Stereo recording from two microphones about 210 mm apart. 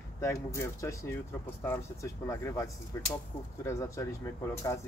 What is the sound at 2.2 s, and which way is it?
Speech, 15° left (ahead or behind).